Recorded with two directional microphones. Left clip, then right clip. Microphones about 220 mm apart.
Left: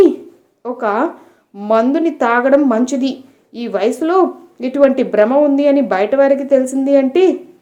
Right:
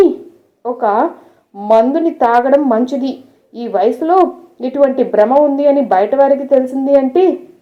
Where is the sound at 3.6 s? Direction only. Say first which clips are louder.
Right 3 dB; 35° left (ahead or behind).